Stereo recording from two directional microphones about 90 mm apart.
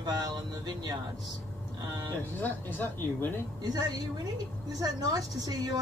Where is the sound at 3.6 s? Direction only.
50° right (ahead or behind).